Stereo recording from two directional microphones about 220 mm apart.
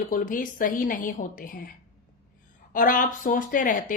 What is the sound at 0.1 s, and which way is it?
Speech, 40° left (ahead or behind).